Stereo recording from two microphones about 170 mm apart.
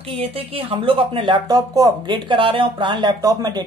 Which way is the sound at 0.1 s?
35° right (ahead or behind).